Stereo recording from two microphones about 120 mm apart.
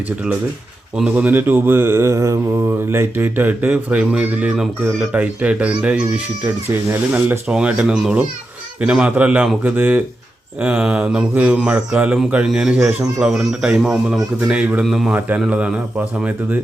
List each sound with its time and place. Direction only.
0.9 s mantra: 10° right (ahead or behind)
7.1 s mantra: 10° right (ahead or behind)
12.5 s speech: 5° right (ahead or behind)
15.1 s mantra: 10° right (ahead or behind)